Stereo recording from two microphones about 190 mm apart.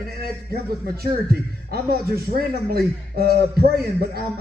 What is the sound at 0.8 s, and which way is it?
A man's voice, 55° right (ahead or behind).